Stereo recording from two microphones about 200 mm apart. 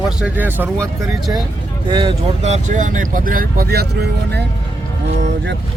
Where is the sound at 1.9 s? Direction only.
25° right (ahead or behind); by 4.5 s 55° right (ahead or behind).